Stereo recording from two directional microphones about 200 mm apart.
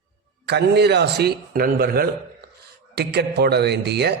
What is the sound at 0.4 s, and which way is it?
A man's voice, 55° right (ahead or behind).